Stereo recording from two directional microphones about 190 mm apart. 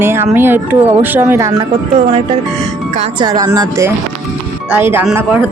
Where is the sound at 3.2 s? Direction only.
20° right (ahead or behind).